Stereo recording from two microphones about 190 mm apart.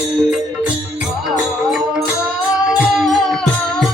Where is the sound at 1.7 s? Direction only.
Centre (ahead or behind).